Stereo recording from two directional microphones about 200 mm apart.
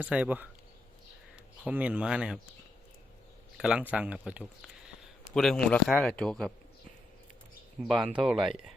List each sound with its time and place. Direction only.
0.0 s speech: 5° right (ahead or behind)
1.6 s speech: 5° right (ahead or behind)
3.6 s speech: 5° right (ahead or behind)
7.9 s speech: centre (ahead or behind)